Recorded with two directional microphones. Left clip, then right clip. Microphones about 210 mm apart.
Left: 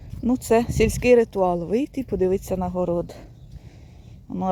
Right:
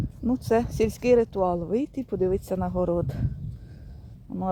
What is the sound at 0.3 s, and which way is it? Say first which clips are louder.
Speech: left 4 dB; 15° left (ahead or behind).